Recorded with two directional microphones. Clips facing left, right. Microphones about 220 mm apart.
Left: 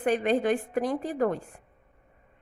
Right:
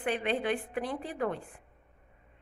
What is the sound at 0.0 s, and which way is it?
A woman's voice, 45° left (ahead or behind).